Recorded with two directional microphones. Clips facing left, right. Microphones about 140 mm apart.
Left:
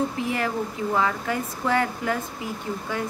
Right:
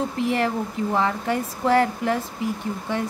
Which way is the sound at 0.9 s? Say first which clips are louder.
Right 2 dB; 30° right (ahead or behind).